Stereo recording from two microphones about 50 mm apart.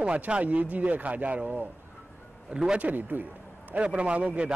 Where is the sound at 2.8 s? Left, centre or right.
Right.